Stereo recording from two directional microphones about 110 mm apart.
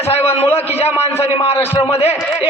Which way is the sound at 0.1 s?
70° left (ahead or behind).